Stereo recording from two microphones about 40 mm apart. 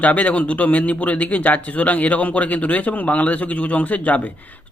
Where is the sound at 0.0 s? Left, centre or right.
Left.